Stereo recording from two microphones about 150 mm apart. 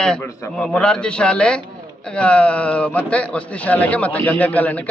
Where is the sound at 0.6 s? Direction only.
5° left (ahead or behind).